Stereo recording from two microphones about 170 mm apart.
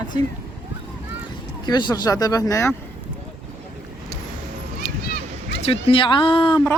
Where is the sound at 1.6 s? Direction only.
25° left (ahead or behind).